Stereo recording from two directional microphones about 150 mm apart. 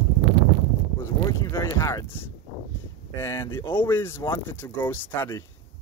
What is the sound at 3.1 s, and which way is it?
Speech, 20° left (ahead or behind).